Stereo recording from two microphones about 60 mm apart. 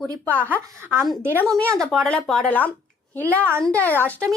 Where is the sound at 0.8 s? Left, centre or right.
Right.